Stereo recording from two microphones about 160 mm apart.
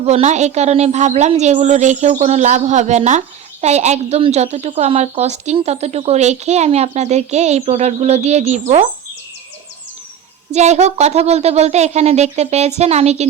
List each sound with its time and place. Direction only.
0.0 s a woman's voice: 45° right (ahead or behind)
10.5 s a woman's voice: 45° right (ahead or behind)